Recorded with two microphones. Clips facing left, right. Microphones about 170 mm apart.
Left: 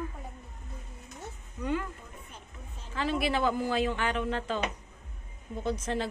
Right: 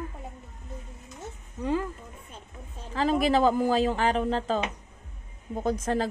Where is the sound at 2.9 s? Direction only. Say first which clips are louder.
Right 6 dB; 40° right (ahead or behind).